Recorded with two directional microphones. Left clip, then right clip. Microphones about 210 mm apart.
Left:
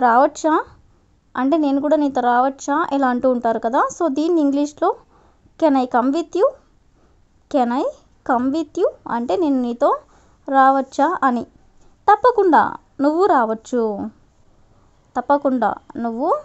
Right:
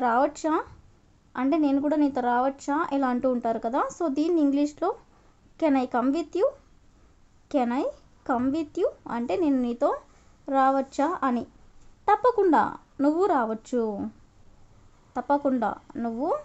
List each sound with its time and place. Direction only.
0.0 s a woman's voice: 25° left (ahead or behind)
15.1 s a woman's voice: 25° left (ahead or behind)